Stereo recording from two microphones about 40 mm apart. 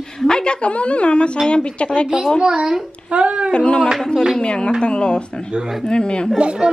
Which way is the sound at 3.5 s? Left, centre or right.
Left.